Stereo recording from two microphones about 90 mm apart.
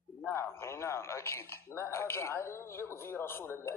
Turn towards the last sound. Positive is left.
turn(degrees=25)  # may be behind; listen again after turning